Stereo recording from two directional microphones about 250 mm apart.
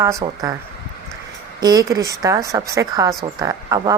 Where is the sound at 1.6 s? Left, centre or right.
Centre.